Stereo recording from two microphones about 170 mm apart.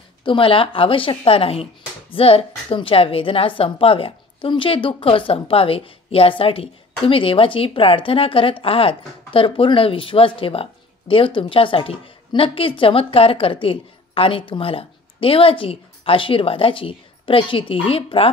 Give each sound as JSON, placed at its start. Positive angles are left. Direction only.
{"t": 0.2, "sound": "a woman's voice", "side_deg": 30}